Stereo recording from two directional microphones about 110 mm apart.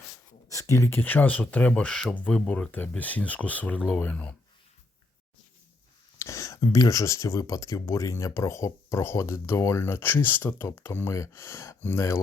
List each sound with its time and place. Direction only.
0.4 s speech: 30° left (ahead or behind); by 4.4 s 10° left (ahead or behind)
6.1 s speech: 25° left (ahead or behind)